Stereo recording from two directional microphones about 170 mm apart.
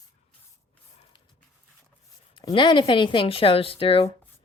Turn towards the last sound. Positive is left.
turn(degrees=30)  # may be behind; listen again after turning